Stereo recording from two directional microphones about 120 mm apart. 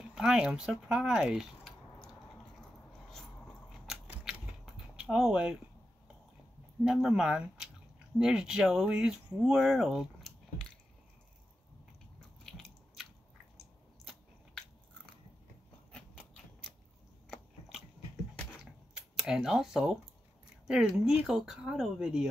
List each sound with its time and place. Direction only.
0.1 s speech: 5° right (ahead or behind)
3.7 s scissors: 5° right (ahead or behind)
6.8 s speech: 5° right (ahead or behind)
12.4 s biting: centre (ahead or behind)
17.3 s biting: centre (ahead or behind)
18.6 s a sound: 5° right (ahead or behind)
20.6 s speech: 5° right (ahead or behind)